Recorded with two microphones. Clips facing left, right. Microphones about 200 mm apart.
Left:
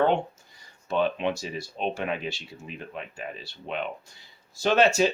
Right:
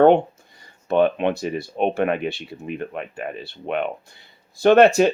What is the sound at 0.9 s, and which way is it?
Speech, 60° right (ahead or behind).